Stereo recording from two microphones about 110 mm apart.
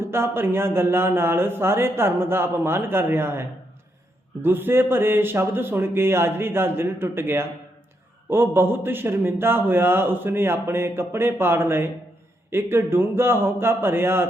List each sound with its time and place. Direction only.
0.0 s a man's voice: 20° right (ahead or behind)
4.4 s a man's voice: 20° right (ahead or behind)